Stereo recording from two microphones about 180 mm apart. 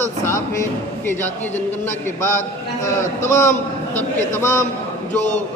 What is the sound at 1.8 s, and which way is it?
A man's voice, 15° left (ahead or behind).